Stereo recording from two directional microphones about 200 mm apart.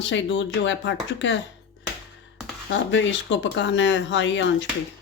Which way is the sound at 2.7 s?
70° left (ahead or behind).